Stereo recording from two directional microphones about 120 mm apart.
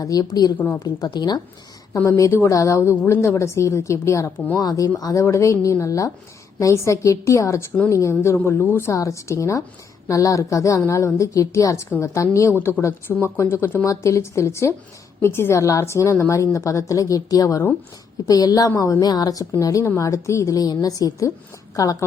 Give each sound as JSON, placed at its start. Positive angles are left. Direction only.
{"t": 0.0, "sound": "speech", "side_deg": 30}
{"t": 2.0, "sound": "a woman's voice", "side_deg": 25}